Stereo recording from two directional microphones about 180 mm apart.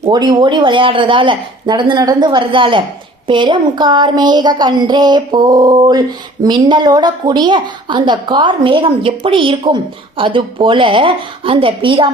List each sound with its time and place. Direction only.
0.0 s a woman's voice: 20° right (ahead or behind)